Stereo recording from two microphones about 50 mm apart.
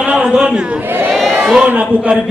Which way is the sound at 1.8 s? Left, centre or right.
Right.